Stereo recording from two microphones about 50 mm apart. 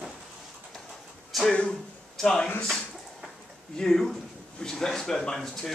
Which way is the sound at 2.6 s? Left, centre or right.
Centre.